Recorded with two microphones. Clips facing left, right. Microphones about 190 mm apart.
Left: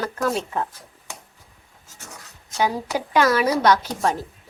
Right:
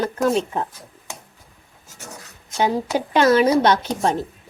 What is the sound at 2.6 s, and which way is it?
Speech, 25° right (ahead or behind).